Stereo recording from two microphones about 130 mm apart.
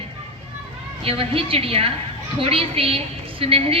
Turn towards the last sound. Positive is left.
turn(degrees=-45)  # may be behind; listen again after turning